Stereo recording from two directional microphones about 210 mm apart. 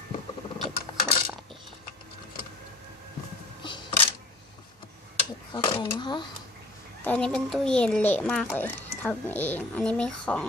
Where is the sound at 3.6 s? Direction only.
25° left (ahead or behind).